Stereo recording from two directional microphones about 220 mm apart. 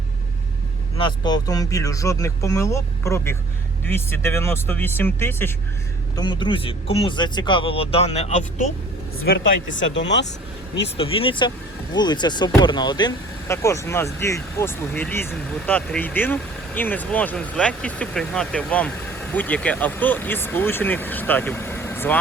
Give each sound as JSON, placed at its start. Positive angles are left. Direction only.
{"t": 0.9, "sound": "speech", "side_deg": 20}
{"t": 6.1, "sound": "speech", "side_deg": 20}
{"t": 9.7, "sound": "speech", "side_deg": 55}
{"t": 10.8, "sound": "speech", "side_deg": 25}